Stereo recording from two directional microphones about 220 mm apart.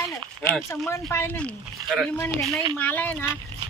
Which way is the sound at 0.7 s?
15° left (ahead or behind).